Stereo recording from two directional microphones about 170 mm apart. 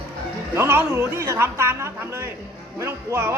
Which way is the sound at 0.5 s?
15° right (ahead or behind).